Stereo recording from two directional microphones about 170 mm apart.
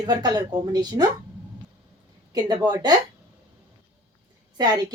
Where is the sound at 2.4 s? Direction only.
25° right (ahead or behind).